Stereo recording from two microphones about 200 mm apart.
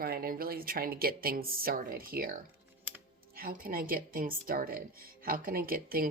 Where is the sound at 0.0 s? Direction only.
50° right (ahead or behind).